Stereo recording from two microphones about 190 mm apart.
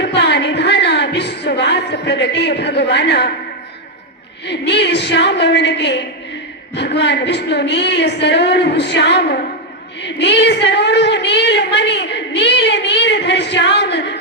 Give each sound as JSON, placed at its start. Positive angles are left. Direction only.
{"t": 0.0, "sound": "speech", "side_deg": 65}
{"t": 4.4, "sound": "a woman's voice", "side_deg": 65}